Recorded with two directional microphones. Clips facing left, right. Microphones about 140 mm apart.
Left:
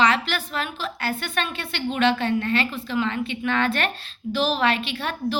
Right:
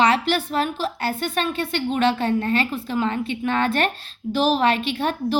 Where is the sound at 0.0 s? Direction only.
45° right (ahead or behind).